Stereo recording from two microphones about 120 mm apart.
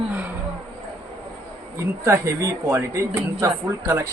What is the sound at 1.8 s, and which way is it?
Speech, 25° right (ahead or behind).